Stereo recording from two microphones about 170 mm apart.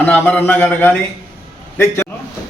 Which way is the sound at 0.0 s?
10° left (ahead or behind).